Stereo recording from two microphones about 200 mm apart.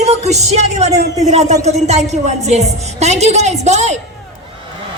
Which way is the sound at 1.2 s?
35° right (ahead or behind).